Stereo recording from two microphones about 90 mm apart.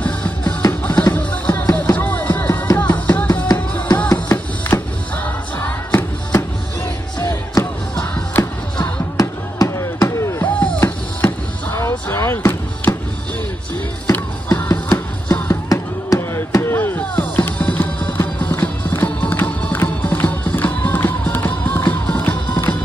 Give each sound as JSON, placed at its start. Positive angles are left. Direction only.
{"t": 0.0, "sound": "music", "side_deg": 15}
{"t": 8.0, "sound": "music", "side_deg": 20}
{"t": 9.1, "sound": "a sound", "side_deg": 35}
{"t": 10.4, "sound": "music", "side_deg": 20}
{"t": 12.1, "sound": "a sound", "side_deg": 30}
{"t": 14.1, "sound": "music", "side_deg": 25}
{"t": 15.7, "sound": "chop", "side_deg": 35}
{"t": 17.2, "sound": "music", "side_deg": 20}